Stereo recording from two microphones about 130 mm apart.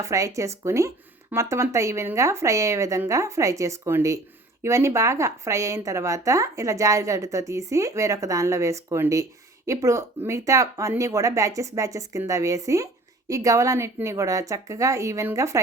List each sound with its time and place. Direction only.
0.0 s speech: 25° right (ahead or behind)